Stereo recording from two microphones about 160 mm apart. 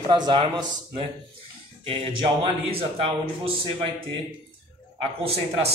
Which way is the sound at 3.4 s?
35° right (ahead or behind).